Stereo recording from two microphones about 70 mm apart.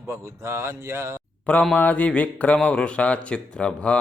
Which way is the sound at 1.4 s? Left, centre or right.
Centre.